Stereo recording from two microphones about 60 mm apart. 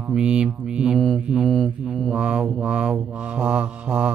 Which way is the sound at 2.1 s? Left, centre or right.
Centre.